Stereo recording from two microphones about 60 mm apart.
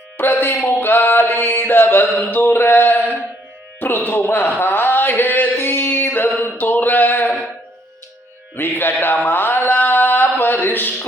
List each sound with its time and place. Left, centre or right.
0.2 s music: left
1.5 s mantra: left
2.2 s speech: left
4.6 s a sound: left
8.5 s speech: left
9.2 s a sound: left